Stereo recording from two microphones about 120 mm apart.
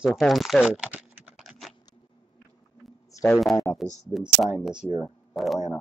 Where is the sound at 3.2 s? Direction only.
5° left (ahead or behind).